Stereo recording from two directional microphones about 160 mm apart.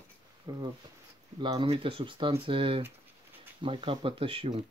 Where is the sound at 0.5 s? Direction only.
25° right (ahead or behind).